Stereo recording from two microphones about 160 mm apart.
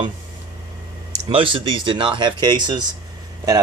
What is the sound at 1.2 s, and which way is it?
Speech, 35° right (ahead or behind).